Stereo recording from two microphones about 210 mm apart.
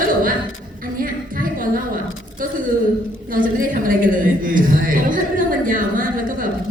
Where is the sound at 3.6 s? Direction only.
40° right (ahead or behind).